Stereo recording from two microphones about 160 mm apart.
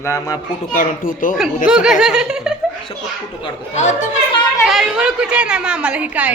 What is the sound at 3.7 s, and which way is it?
Speech, 45° left (ahead or behind).